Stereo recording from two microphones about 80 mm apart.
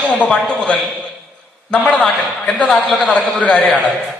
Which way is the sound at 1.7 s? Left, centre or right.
Centre.